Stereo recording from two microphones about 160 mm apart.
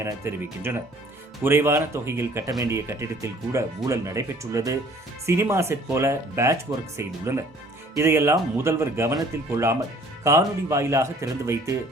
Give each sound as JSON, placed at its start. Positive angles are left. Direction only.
{"t": 0.0, "sound": "speech", "side_deg": -15}